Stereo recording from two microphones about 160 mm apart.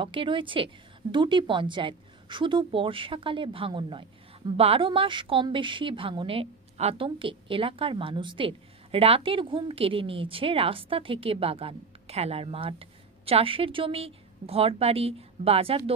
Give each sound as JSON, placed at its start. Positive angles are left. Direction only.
{"t": 0.0, "sound": "a woman's voice", "side_deg": -30}